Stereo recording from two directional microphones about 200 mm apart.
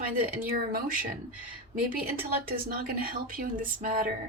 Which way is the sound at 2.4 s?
45° right (ahead or behind).